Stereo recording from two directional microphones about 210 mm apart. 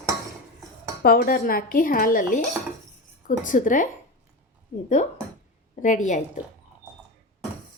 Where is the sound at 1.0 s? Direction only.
45° left (ahead or behind).